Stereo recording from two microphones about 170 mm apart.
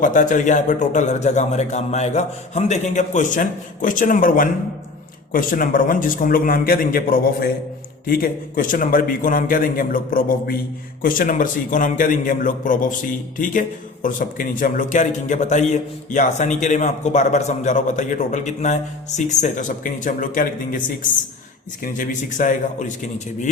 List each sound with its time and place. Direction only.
0.0 s a man's voice: 50° left (ahead or behind)